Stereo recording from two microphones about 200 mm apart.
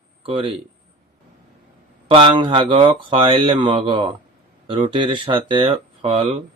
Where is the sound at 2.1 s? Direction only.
25° right (ahead or behind).